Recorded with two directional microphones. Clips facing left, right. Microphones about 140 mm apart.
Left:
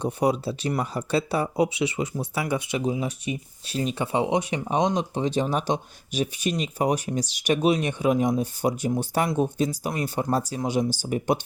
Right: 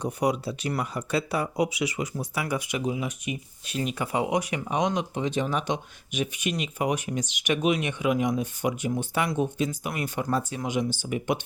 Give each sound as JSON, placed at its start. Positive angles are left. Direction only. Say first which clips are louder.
{"t": 0.0, "sound": "speech", "louder": "left 3 dB", "side_deg": 30}